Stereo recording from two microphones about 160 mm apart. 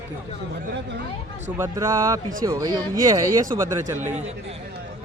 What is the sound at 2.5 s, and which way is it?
A man's voice, 30° right (ahead or behind).